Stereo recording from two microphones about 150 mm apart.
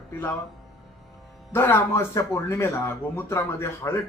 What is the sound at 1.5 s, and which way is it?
Speech, 15° left (ahead or behind).